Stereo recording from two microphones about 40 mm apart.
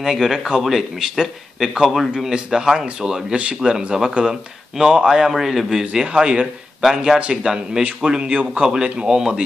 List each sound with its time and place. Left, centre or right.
0.0 s a man's voice: centre
0.9 s a man's voice: centre
6.4 s a man's voice: centre
7.2 s speech: right